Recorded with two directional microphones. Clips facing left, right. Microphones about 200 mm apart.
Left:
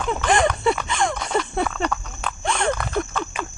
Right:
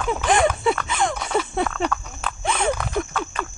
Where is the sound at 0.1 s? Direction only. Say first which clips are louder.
Right 1 dB; 5° right (ahead or behind).